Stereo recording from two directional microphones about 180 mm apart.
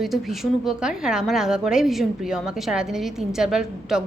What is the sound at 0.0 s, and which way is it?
A woman's voice, centre (ahead or behind).